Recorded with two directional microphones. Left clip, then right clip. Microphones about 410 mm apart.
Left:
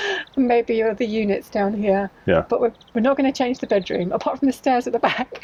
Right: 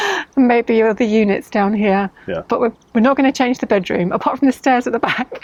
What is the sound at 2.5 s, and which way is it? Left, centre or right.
Speech, right.